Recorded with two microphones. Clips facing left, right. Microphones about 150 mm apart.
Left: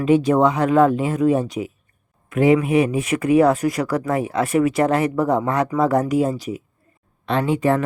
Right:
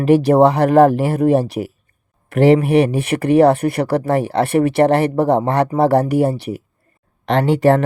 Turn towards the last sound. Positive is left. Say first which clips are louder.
# right 5 dB
turn(degrees=-75)  # may be behind; listen again after turning